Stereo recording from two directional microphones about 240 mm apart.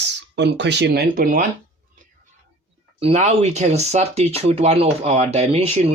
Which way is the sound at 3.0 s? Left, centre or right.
Right.